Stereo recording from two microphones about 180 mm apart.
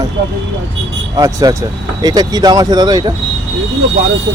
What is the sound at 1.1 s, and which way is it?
Speech, 20° right (ahead or behind).